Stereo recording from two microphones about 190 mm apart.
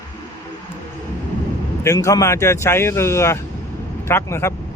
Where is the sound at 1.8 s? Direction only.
15° left (ahead or behind).